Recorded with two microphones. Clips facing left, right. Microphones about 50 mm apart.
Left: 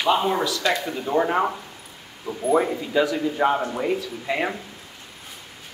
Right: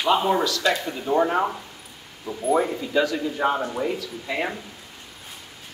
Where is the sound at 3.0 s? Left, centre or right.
Centre.